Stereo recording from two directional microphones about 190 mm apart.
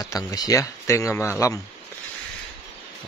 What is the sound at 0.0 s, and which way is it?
Speech, 20° left (ahead or behind).